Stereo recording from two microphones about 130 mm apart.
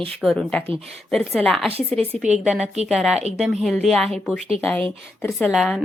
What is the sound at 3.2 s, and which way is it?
Speech, 55° right (ahead or behind).